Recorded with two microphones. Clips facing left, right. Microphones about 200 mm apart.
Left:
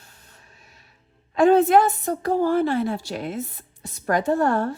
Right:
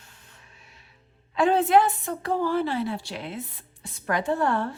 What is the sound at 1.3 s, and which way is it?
A woman's voice, 45° left (ahead or behind).